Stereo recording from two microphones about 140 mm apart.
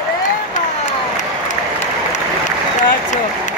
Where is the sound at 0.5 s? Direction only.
60° left (ahead or behind).